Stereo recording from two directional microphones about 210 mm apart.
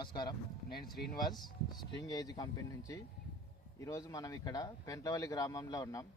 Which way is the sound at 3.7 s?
15° left (ahead or behind).